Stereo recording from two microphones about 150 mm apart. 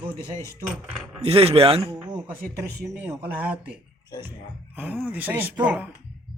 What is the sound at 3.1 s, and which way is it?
Speech, 10° right (ahead or behind).